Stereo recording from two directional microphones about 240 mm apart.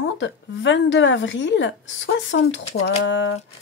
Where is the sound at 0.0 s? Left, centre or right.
Left.